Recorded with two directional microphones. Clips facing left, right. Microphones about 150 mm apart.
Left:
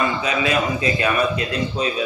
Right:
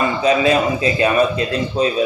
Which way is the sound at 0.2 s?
30° right (ahead or behind).